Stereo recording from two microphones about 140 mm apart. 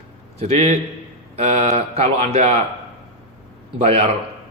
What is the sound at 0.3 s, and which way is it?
A man's voice, 45° right (ahead or behind).